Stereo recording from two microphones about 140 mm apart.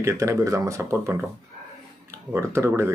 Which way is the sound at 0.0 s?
20° right (ahead or behind).